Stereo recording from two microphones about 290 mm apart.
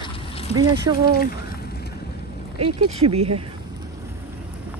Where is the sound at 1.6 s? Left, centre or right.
Left.